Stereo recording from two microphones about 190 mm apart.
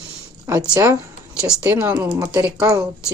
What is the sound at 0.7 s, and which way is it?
Speech, 15° right (ahead or behind).